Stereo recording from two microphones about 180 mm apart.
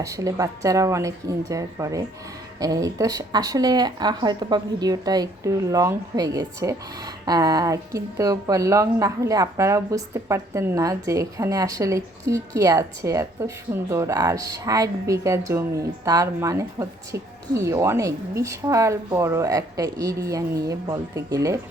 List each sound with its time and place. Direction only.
0.0 s speech: 20° right (ahead or behind)